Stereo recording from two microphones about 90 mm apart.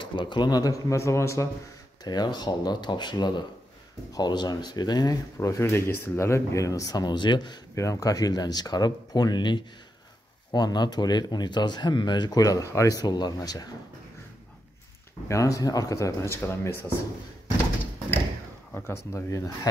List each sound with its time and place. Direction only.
0.0 s speech: 65° left (ahead or behind); by 1.5 s 35° left (ahead or behind)
2.0 s speech: 50° left (ahead or behind)
7.7 s speech: 35° left (ahead or behind)
15.2 s speech: 35° left (ahead or behind)
18.7 s speech: 25° left (ahead or behind)